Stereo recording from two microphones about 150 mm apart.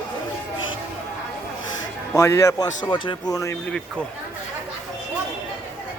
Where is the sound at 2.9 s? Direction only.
35° left (ahead or behind).